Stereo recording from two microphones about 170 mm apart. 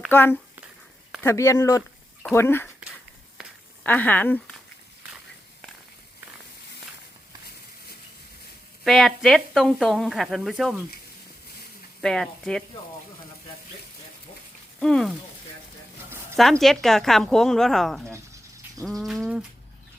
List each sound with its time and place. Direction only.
0.1 s speech: 10° left (ahead or behind)
3.8 s speech: 10° left (ahead or behind)
8.8 s speech: centre (ahead or behind)
12.0 s speech: 5° left (ahead or behind)
14.8 s speech: 5° left (ahead or behind)
16.0 s a sound: 15° right (ahead or behind)
16.4 s speech: centre (ahead or behind)
18.8 s bird: centre (ahead or behind)